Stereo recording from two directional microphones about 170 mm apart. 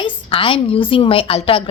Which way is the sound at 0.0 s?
30° left (ahead or behind).